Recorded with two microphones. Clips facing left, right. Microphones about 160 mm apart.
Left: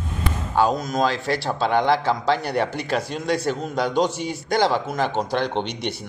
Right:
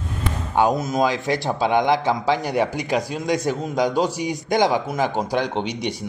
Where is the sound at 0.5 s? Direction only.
20° right (ahead or behind).